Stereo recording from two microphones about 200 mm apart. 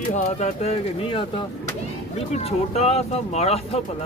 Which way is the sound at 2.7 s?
30° left (ahead or behind).